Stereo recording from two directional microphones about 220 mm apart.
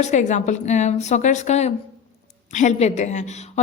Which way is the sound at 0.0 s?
35° left (ahead or behind).